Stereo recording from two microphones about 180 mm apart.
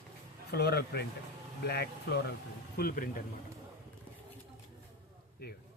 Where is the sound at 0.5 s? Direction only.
60° left (ahead or behind).